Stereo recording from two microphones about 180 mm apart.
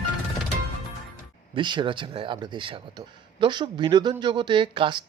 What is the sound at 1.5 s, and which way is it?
Speech, 25° right (ahead or behind).